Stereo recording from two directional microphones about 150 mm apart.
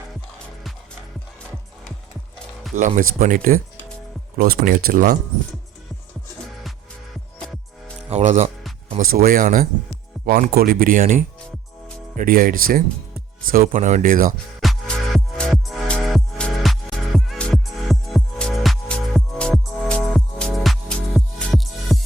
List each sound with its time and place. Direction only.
2.7 s speech: 55° right (ahead or behind)
8.1 s speech: 45° right (ahead or behind)
9.1 s speech: 70° right (ahead or behind)
13.7 s speech: 55° right (ahead or behind)
14.6 s music: centre (ahead or behind)